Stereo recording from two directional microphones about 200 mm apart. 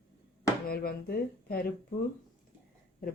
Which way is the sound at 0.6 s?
50° left (ahead or behind).